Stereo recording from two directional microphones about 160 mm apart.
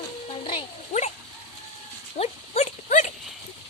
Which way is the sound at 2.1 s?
40° left (ahead or behind).